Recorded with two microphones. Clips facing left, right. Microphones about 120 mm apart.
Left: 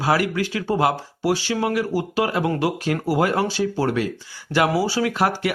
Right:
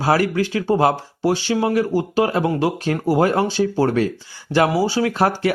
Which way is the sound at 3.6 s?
40° right (ahead or behind).